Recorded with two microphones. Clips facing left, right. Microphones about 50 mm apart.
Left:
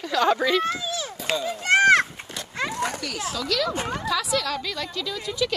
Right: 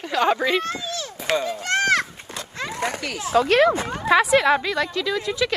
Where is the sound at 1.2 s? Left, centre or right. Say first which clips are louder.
Right 4 dB; right.